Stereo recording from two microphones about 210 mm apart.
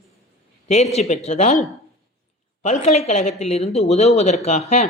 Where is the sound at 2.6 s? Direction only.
30° left (ahead or behind).